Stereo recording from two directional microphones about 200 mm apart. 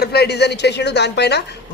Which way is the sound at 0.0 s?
50° left (ahead or behind).